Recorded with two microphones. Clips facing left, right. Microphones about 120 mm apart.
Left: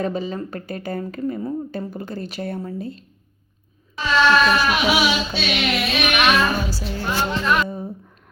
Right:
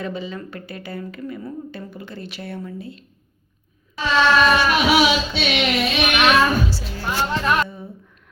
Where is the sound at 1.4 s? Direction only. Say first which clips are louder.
Left 6 dB; 30° left (ahead or behind).